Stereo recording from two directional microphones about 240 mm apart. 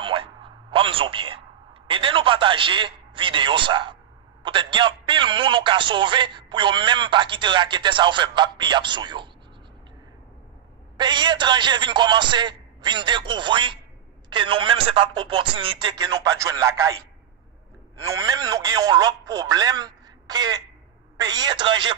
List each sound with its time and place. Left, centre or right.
0.0 s a man's voice: right
11.0 s a man's voice: centre
17.9 s a man's voice: centre